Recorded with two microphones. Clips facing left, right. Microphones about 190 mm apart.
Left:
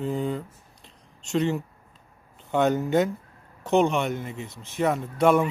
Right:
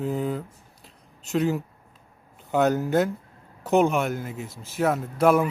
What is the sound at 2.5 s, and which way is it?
Speech, 5° right (ahead or behind).